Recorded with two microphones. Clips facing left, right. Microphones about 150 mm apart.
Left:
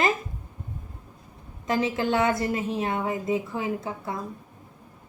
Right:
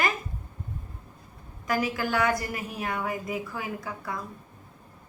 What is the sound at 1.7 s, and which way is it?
A woman's voice, 25° left (ahead or behind).